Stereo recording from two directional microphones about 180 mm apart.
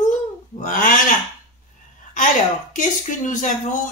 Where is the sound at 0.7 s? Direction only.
50° left (ahead or behind).